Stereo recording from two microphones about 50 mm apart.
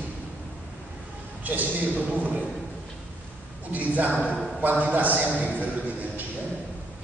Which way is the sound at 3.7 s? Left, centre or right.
Right.